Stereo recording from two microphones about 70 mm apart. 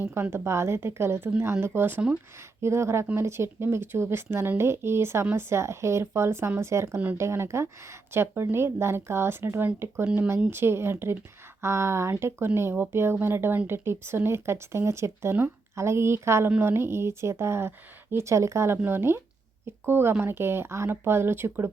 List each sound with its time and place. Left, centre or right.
0.0 s speech: right